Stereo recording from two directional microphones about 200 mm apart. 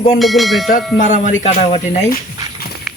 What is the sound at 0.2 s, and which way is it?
Speech, centre (ahead or behind).